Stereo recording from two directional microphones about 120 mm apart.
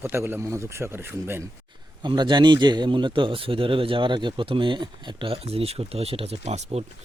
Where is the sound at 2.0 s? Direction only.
40° right (ahead or behind).